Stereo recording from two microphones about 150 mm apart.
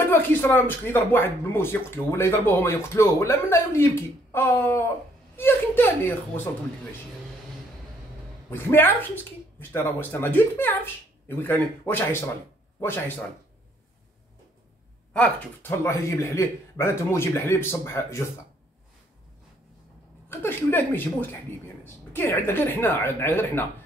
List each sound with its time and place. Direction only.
0.1 s speech: 15° left (ahead or behind)
8.5 s speech: 15° left (ahead or behind)
15.1 s speech: 10° left (ahead or behind)
20.2 s speech: 15° left (ahead or behind)